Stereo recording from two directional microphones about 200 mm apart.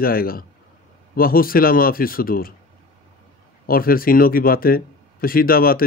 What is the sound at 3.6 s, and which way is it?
Speech, 45° left (ahead or behind).